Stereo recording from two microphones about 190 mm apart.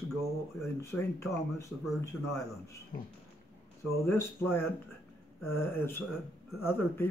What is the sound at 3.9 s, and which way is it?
Speech, 15° left (ahead or behind).